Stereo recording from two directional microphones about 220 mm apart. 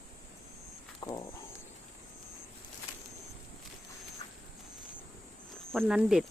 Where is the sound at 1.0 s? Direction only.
20° left (ahead or behind).